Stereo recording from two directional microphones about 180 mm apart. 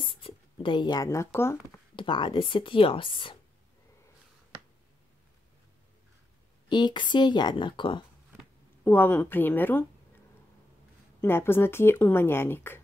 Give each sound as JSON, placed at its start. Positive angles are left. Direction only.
{"t": 0.1, "sound": "speech", "side_deg": 30}
{"t": 2.0, "sound": "speech", "side_deg": 25}
{"t": 6.7, "sound": "speech", "side_deg": 25}
{"t": 8.8, "sound": "speech", "side_deg": 10}
{"t": 11.1, "sound": "speech", "side_deg": 15}